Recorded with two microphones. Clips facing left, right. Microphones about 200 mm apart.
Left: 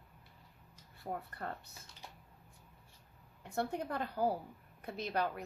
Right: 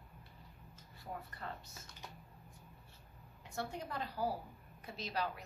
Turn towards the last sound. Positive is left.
turn(degrees=55)  # may be behind; listen again after turning